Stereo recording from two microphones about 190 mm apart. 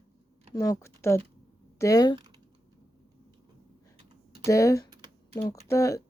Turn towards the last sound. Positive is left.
turn(degrees=15)  # may be behind; listen again after turning